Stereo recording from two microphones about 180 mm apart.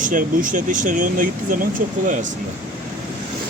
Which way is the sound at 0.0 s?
50° right (ahead or behind).